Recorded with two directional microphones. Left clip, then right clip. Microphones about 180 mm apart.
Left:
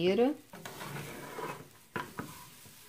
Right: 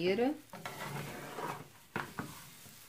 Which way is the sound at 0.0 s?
35° left (ahead or behind).